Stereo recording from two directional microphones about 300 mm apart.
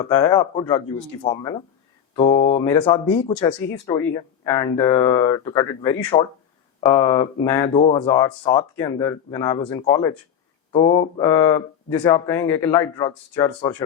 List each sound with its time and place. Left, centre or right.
0.0 s speech: centre